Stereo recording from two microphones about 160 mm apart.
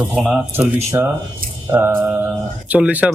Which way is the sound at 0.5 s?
15° right (ahead or behind).